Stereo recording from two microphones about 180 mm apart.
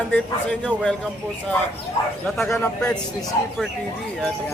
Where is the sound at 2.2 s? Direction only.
5° left (ahead or behind).